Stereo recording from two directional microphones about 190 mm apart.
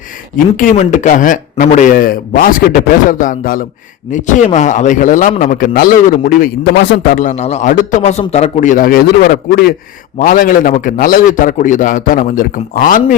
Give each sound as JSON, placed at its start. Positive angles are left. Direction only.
{"t": 0.3, "sound": "a man's voice", "side_deg": 45}